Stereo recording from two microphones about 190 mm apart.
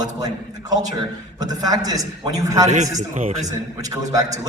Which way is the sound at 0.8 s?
20° right (ahead or behind).